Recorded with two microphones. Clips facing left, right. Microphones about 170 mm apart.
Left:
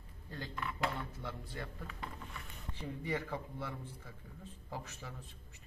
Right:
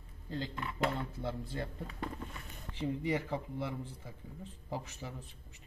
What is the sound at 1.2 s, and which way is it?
Speech, 30° right (ahead or behind).